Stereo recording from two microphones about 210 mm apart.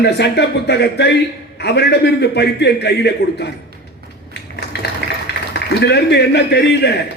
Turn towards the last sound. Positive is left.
turn(degrees=55)  # may be behind; listen again after turning